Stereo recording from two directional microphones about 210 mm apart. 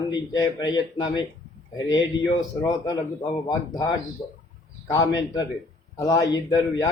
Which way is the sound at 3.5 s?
20° left (ahead or behind).